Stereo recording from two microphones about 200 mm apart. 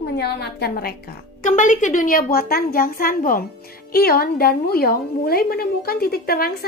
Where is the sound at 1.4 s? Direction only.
40° left (ahead or behind).